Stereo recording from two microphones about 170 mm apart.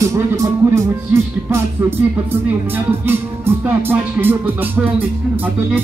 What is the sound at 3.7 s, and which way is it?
Speech, 10° right (ahead or behind).